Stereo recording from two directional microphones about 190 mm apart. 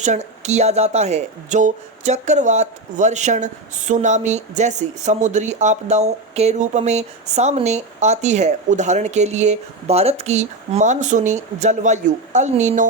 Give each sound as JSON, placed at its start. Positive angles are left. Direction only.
{"t": 0.0, "sound": "speech", "side_deg": -35}